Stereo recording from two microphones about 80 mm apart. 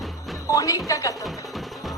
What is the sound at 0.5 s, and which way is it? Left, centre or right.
Speech, left.